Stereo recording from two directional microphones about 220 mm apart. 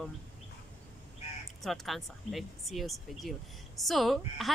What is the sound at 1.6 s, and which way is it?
A woman's voice, centre (ahead or behind).